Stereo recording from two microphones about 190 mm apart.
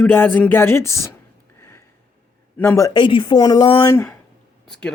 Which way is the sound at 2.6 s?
15° left (ahead or behind).